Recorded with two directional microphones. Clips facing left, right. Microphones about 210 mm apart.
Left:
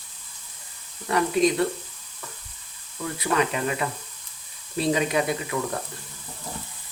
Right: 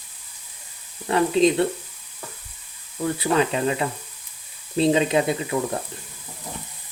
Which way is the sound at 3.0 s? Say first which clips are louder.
Right 4 dB; 30° right (ahead or behind).